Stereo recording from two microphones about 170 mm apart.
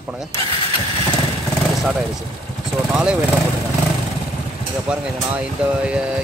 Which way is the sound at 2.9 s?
5° right (ahead or behind).